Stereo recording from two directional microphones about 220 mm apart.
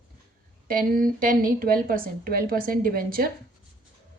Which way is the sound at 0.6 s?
40° right (ahead or behind).